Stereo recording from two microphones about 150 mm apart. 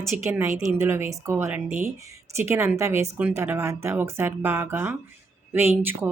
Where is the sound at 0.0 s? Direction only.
15° right (ahead or behind).